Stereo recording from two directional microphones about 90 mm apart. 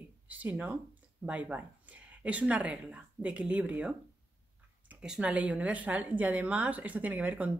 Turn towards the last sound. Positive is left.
turn(degrees=-15)  # may be behind; listen again after turning